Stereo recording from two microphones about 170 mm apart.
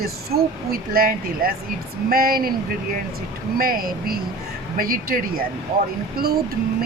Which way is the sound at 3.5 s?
60° right (ahead or behind).